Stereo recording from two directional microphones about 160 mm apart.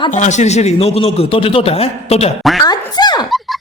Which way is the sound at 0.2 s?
50° left (ahead or behind).